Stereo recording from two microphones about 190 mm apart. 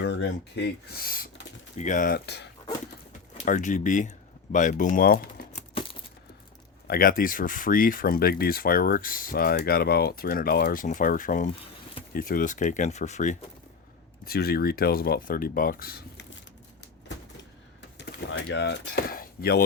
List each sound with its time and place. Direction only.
0.0 s speech: 65° left (ahead or behind)
3.4 s speech: 40° left (ahead or behind)
6.8 s speech: 50° left (ahead or behind)
14.3 s speech: 55° left (ahead or behind)
17.9 s speech: 65° left (ahead or behind)